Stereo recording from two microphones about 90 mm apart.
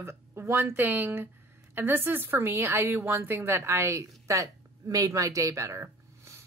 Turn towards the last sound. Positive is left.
turn(degrees=-35)  # may be behind; listen again after turning